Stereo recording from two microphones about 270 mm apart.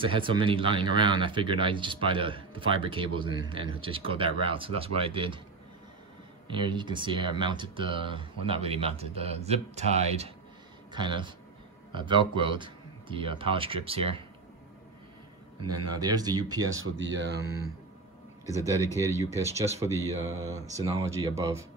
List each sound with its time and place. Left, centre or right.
0.0 s speech: centre
6.4 s speech: centre
15.6 s speech: right
16.0 s speech: centre
16.5 s speech: right
18.4 s speech: centre
18.9 s speech: centre